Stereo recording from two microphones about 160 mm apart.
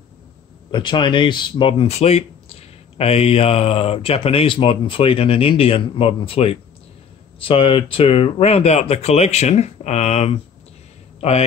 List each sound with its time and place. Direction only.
0.7 s a man's voice: 30° left (ahead or behind)